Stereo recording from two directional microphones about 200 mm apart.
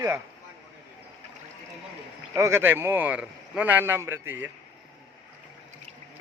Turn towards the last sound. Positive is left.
turn(degrees=-10)  # may be behind; listen again after turning